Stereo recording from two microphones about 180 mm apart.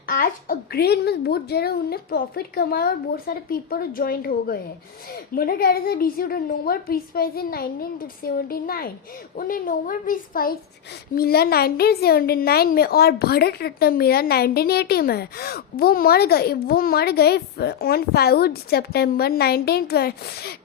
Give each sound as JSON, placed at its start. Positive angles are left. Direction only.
{"t": 0.1, "sound": "a woman's voice", "side_deg": 55}